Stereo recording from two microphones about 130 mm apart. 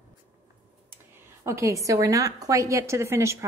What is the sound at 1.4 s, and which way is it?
A woman's voice, 20° right (ahead or behind).